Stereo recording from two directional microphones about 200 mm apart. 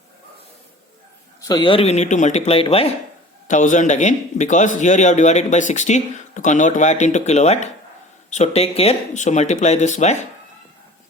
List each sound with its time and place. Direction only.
1.4 s a man's voice: 20° left (ahead or behind); by 10.2 s 35° left (ahead or behind)